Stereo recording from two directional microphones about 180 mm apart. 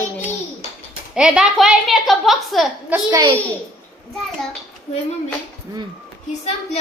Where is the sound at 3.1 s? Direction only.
20° right (ahead or behind).